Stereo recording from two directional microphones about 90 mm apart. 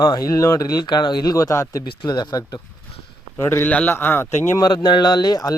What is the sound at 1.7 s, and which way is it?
Speech, 50° left (ahead or behind).